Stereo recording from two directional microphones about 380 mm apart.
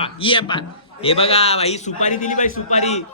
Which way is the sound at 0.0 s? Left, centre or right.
Centre.